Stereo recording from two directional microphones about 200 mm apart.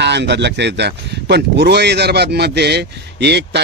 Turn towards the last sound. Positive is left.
turn(degrees=-55)  # may be behind; listen again after turning